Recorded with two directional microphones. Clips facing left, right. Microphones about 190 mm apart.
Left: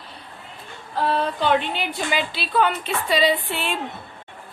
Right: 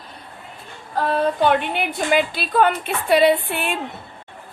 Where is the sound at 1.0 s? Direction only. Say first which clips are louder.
Right 3 dB; 45° right (ahead or behind).